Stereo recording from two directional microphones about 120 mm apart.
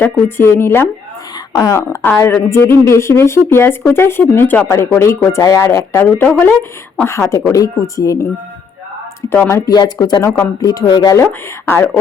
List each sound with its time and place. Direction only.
0.0 s speech: 20° left (ahead or behind)